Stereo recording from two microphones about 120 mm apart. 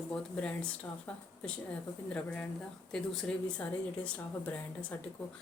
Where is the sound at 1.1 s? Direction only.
10° left (ahead or behind).